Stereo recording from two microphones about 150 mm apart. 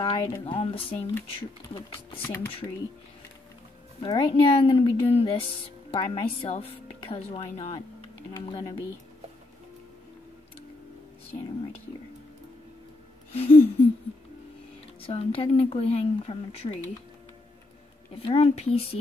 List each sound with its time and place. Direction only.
0.0 s speech: 30° left (ahead or behind)
4.0 s speech: 35° left (ahead or behind)
8.4 s speech: 30° left (ahead or behind)
13.3 s speech: 40° left (ahead or behind)
15.0 s speech: 40° left (ahead or behind)
18.1 s speech: 40° left (ahead or behind)